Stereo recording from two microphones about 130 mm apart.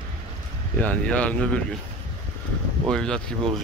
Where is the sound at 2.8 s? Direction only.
5° left (ahead or behind).